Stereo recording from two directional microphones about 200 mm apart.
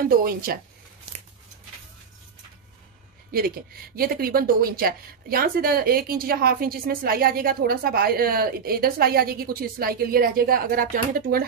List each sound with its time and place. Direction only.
0.0 s speech: 45° right (ahead or behind)
3.3 s speech: 50° right (ahead or behind)